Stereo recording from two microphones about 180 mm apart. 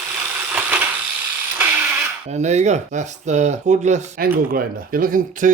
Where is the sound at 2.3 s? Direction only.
40° right (ahead or behind).